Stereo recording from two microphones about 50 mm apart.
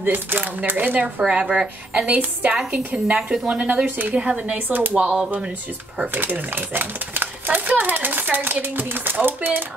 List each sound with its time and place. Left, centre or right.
0.0 s a child's voice: right
1.2 s speech: centre
2.0 s a child's voice: right
4.1 s speech: right
4.6 s a child's voice: right
4.9 s speech: right
6.1 s a child's voice: right